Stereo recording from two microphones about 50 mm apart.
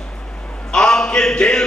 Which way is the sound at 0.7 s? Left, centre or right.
Centre.